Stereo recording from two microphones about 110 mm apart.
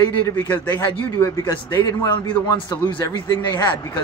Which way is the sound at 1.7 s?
40° left (ahead or behind).